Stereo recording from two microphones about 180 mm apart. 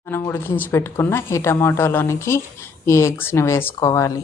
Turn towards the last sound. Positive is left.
turn(degrees=20)  # may be behind; listen again after turning